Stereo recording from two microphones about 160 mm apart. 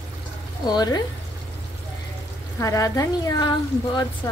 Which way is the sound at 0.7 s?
25° left (ahead or behind).